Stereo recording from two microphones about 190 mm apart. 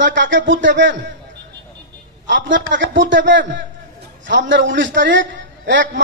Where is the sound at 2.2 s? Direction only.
75° right (ahead or behind).